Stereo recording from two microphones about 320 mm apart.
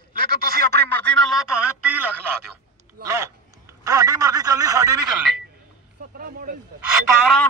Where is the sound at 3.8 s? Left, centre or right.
Centre.